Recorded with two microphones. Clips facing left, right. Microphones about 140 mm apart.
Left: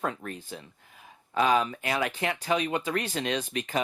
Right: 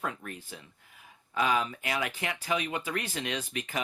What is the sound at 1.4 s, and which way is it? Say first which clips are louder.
Speech: left 4 dB; 30° left (ahead or behind).